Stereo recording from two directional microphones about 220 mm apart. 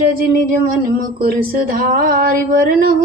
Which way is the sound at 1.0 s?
40° right (ahead or behind).